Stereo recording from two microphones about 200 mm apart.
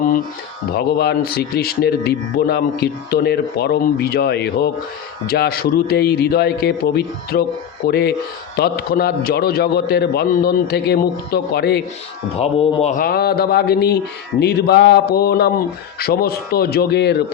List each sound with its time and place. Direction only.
0.8 s speech: 55° left (ahead or behind)
12.4 s speech: 30° left (ahead or behind); by 17.2 s 55° left (ahead or behind)